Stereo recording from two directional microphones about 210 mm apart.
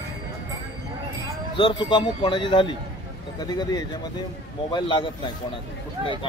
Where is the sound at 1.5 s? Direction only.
20° left (ahead or behind).